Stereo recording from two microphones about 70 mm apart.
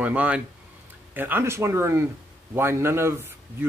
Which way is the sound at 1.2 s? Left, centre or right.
Right.